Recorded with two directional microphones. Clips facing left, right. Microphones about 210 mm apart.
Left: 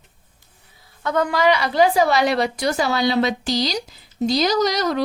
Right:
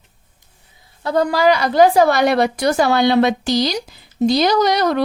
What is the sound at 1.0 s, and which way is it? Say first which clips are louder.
A woman's voice: right 3 dB; 35° right (ahead or behind).